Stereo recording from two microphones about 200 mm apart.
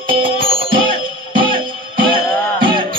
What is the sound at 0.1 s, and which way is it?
Music, 25° right (ahead or behind).